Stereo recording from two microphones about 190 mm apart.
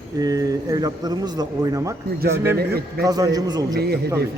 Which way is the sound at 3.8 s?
55° right (ahead or behind).